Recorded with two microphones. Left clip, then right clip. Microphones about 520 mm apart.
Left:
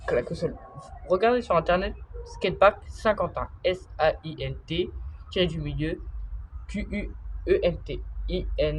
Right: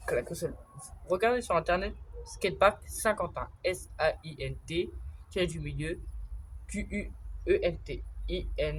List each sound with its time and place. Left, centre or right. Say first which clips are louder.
0.0 s a woman's voice: left 6 dB; right